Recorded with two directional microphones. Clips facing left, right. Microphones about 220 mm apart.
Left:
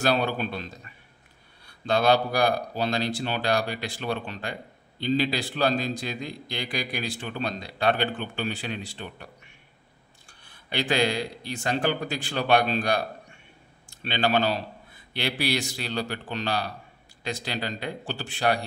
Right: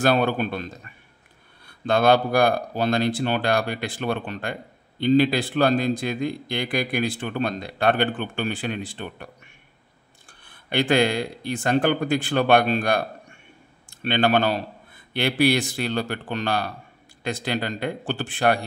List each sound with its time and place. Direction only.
0.0 s a man's voice: 55° right (ahead or behind)